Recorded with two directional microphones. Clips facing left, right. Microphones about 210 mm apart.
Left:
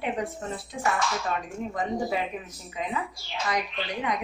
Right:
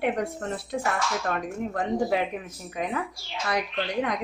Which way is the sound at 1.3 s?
60° right (ahead or behind).